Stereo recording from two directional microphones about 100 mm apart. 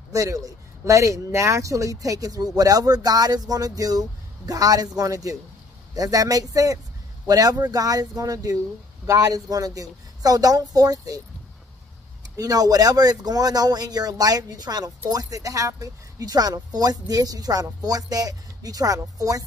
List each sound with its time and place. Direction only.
0.1 s a man's voice: 35° right (ahead or behind)
12.4 s a man's voice: 40° right (ahead or behind)